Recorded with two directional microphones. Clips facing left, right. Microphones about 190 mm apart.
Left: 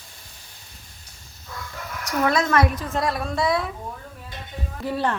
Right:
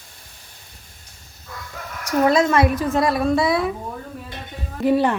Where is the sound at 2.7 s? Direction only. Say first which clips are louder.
Right 6 dB; 5° right (ahead or behind).